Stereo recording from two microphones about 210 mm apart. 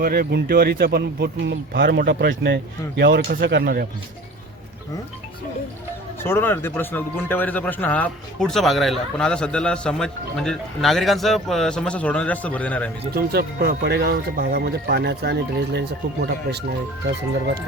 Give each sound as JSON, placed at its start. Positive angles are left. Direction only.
{"t": 0.0, "sound": "speech", "side_deg": -45}
{"t": 6.2, "sound": "speech", "side_deg": 10}
{"t": 13.1, "sound": "speech", "side_deg": -50}